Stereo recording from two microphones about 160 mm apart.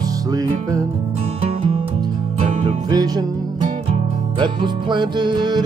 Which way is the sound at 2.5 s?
45° right (ahead or behind).